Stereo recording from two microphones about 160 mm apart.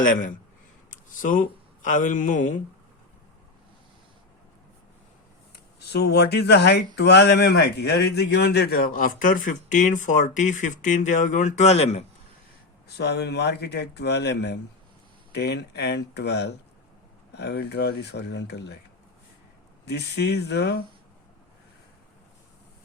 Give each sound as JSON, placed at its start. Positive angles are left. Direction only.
{"t": 0.0, "sound": "speech", "side_deg": 55}
{"t": 5.8, "sound": "speech", "side_deg": 90}
{"t": 12.9, "sound": "speech", "side_deg": 90}
{"t": 19.9, "sound": "speech", "side_deg": 90}